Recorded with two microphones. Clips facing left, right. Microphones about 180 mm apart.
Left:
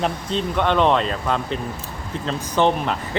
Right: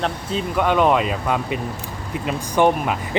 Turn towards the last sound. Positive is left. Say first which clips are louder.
# right 2 dB
turn(degrees=-10)  # may be behind; listen again after turning